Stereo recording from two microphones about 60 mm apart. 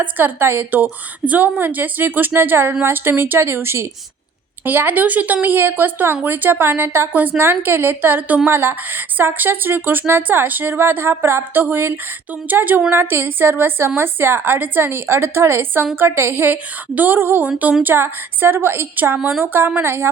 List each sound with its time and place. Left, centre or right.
0.0 s speech: right
4.6 s speech: right
7.1 s speech: right